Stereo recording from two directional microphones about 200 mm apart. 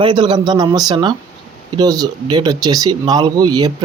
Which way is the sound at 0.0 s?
25° right (ahead or behind).